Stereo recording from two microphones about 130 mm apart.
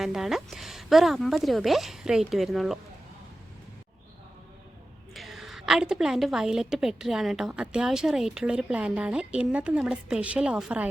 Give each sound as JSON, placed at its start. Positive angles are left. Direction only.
{"t": 0.0, "sound": "a woman's voice", "side_deg": 0}
{"t": 5.1, "sound": "a woman's voice", "side_deg": 0}